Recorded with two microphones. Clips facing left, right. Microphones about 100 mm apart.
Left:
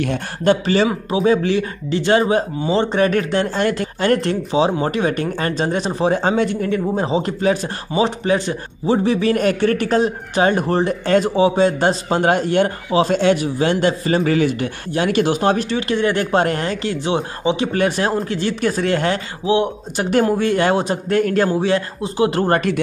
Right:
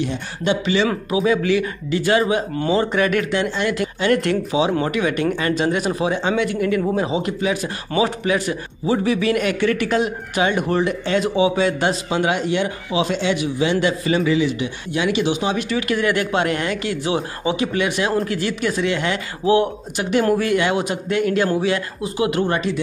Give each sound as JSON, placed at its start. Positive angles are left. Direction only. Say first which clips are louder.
{"t": 0.0, "sound": "speech", "louder": "left 4 dB", "side_deg": 55}
{"t": 1.1, "sound": "a man's voice", "louder": "left 1 dB", "side_deg": 35}
{"t": 7.9, "sound": "a man's voice", "louder": "left 2 dB", "side_deg": 30}
{"t": 15.9, "sound": "a man's voice", "louder": "left 3 dB", "side_deg": 30}
{"t": 17.7, "sound": "a man's voice", "louder": "left 2 dB", "side_deg": 40}
{"t": 19.4, "sound": "speech", "louder": "right 1 dB", "side_deg": 20}
{"t": 20.0, "sound": "a man's voice", "louder": "left 3 dB", "side_deg": 40}
{"t": 20.2, "sound": "a man's voice", "louder": "left 1 dB", "side_deg": 25}
{"t": 22.5, "sound": "speech", "louder": "left 4 dB", "side_deg": 55}